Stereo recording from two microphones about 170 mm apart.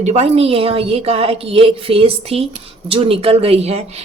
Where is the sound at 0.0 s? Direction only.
40° right (ahead or behind).